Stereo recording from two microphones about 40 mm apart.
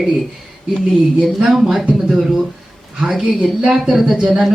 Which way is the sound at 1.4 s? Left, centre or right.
Centre.